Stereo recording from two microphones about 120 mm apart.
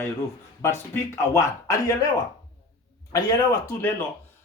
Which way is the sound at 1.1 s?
25° left (ahead or behind).